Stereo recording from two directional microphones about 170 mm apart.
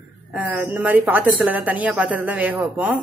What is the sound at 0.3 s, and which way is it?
Speech, 10° right (ahead or behind).